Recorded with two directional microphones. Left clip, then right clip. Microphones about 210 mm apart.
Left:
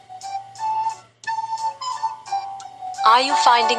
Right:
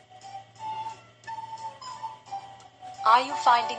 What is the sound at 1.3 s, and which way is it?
Flute, 45° left (ahead or behind).